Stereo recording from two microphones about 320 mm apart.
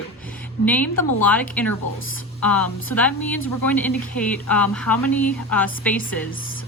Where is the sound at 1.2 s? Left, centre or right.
Centre.